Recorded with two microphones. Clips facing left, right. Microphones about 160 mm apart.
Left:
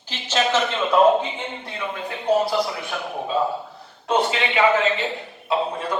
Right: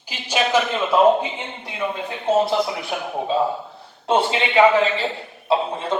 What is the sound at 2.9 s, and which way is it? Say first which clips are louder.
Speech: right 3 dB; 10° right (ahead or behind).